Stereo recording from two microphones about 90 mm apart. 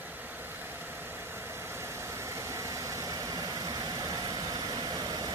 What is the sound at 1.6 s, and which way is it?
Vehicle, 30° right (ahead or behind).